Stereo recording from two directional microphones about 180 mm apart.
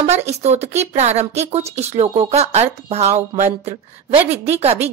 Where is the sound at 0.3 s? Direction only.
35° right (ahead or behind).